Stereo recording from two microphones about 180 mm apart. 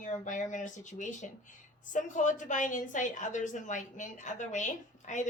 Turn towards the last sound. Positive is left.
turn(degrees=45)  # may be behind; listen again after turning